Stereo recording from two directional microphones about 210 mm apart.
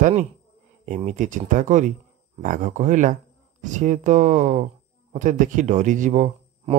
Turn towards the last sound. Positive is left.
turn(degrees=-35)  # may be behind; listen again after turning